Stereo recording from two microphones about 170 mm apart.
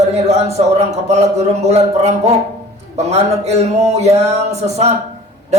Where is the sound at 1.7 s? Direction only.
40° right (ahead or behind).